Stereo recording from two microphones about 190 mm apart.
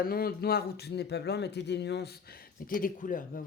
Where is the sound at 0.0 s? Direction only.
50° left (ahead or behind).